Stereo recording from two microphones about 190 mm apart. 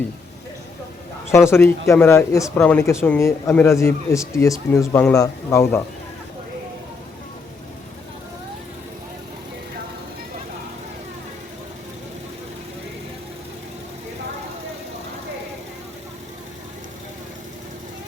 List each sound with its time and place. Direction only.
1.3 s speech: 15° left (ahead or behind)